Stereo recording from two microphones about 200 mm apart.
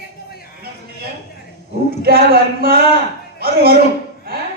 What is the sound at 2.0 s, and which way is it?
A man's voice, 50° right (ahead or behind).